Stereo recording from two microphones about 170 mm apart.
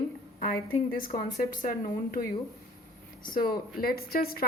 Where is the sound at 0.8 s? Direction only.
55° left (ahead or behind).